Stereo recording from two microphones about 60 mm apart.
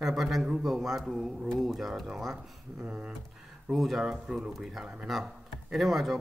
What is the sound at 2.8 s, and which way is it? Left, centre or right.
Speech, centre.